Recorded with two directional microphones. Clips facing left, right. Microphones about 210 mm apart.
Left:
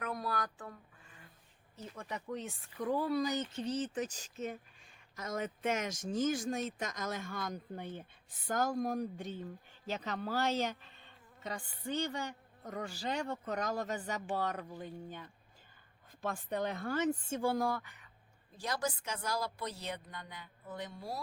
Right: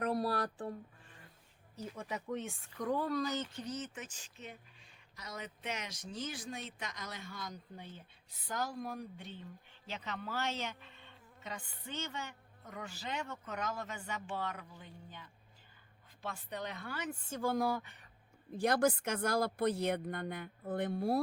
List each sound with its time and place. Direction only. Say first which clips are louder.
0.0 s a sound: right 4 dB; 35° right (ahead or behind)
1.7 s a woman's voice: right 2 dB; 10° right (ahead or behind); by 17.2 s 45° left (ahead or behind)
17.6 s speech: even; 10° right (ahead or behind)
17.8 s speech: even; 30° right (ahead or behind)
18.5 s speech: right 7 dB; 55° right (ahead or behind)